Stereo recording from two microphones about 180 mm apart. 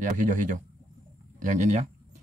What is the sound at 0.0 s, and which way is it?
Speech, 45° right (ahead or behind).